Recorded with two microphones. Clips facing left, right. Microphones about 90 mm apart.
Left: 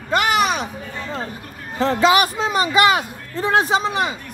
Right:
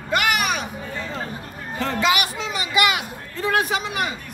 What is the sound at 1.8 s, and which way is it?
Speech, 35° left (ahead or behind).